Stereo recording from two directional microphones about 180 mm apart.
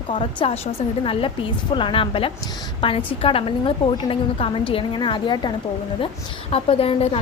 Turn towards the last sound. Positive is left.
turn(degrees=30)  # may be behind; listen again after turning